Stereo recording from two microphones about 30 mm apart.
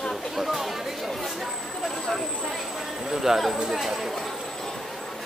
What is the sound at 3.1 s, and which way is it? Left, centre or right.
Speech, centre.